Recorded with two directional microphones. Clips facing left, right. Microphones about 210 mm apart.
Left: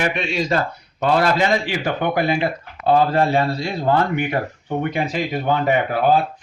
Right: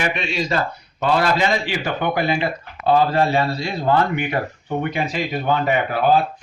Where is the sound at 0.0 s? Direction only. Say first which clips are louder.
Left 2 dB; 50° left (ahead or behind).